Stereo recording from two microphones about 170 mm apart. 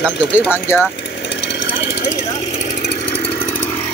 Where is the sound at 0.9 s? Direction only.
90° left.